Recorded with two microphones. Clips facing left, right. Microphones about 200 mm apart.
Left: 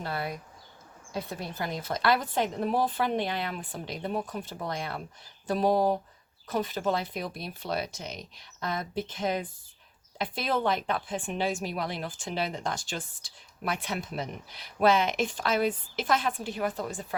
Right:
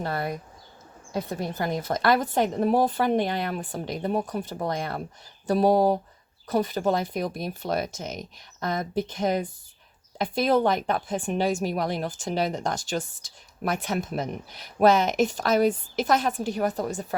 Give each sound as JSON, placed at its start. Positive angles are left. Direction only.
{"t": 0.0, "sound": "speech", "side_deg": -45}
{"t": 1.4, "sound": "speech", "side_deg": -45}